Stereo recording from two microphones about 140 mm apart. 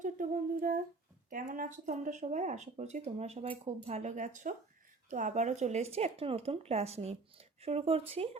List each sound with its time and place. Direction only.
0.0 s humming: 75° right (ahead or behind)
1.3 s speech: 80° right; by 8.4 s 45° right (ahead or behind)